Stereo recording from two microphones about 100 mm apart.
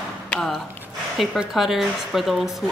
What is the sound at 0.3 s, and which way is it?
Speech, 5° left (ahead or behind).